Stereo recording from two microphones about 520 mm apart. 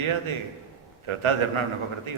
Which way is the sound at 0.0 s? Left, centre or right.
Right.